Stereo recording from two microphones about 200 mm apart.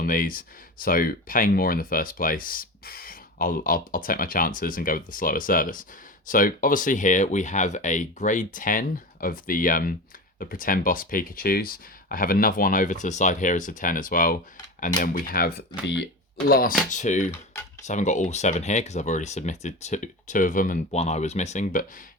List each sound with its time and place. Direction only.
0.0 s speech: 45° left (ahead or behind)